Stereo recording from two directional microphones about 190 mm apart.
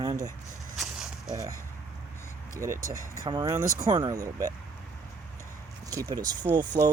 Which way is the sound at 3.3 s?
20° right (ahead or behind).